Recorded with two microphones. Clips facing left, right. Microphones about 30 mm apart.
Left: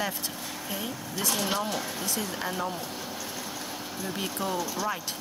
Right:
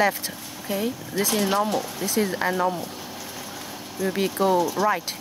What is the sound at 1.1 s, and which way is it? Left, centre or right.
Speech, right.